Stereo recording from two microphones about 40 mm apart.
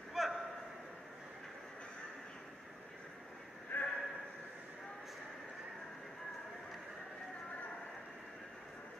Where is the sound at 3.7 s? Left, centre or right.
Left.